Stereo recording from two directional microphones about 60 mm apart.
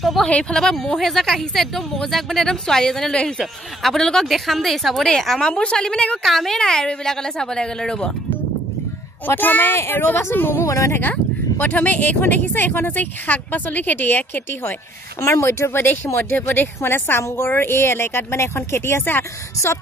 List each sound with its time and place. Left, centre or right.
0.0 s a woman's voice: centre
0.3 s a woman's voice: centre
6.2 s speech: centre
9.2 s speech: left
10.6 s speech: left
11.0 s speech: left
15.1 s speech: left